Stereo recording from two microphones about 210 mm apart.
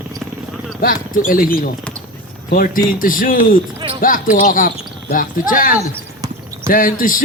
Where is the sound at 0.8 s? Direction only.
40° left (ahead or behind).